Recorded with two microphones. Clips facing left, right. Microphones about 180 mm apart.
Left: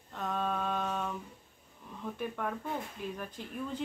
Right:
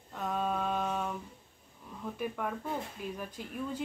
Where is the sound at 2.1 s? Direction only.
5° right (ahead or behind).